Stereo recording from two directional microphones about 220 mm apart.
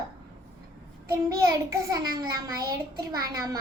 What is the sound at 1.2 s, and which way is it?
A child's voice, 15° right (ahead or behind).